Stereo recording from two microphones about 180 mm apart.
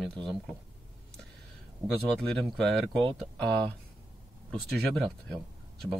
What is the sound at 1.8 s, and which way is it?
Speech, 15° right (ahead or behind).